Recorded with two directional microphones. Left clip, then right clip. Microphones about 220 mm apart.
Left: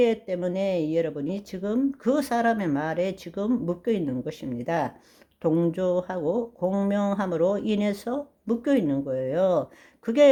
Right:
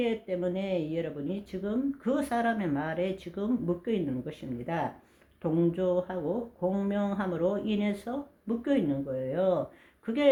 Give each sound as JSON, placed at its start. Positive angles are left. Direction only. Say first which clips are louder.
{"t": 0.0, "sound": "speech", "louder": "left 7 dB", "side_deg": 45}